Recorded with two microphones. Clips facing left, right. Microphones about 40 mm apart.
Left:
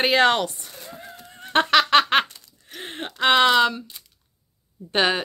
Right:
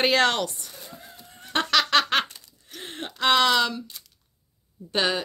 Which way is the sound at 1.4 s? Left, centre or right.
Left.